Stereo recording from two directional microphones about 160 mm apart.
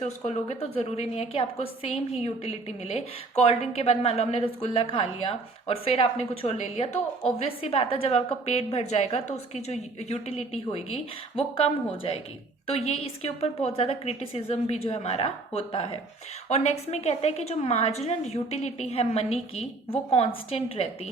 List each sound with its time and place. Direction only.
0.0 s a woman's voice: 45° left (ahead or behind)